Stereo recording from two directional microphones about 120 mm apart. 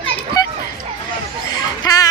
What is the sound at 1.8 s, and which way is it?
Music, 30° left (ahead or behind).